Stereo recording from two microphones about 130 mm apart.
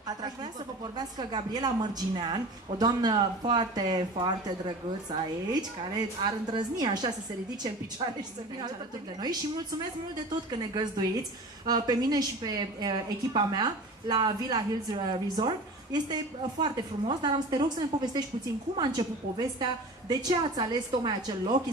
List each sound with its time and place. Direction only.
0.0 s a woman's voice: 30° right (ahead or behind)
10.5 s a woman's voice: 35° right (ahead or behind)